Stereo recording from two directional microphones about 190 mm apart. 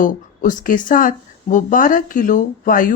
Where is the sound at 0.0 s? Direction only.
45° left (ahead or behind).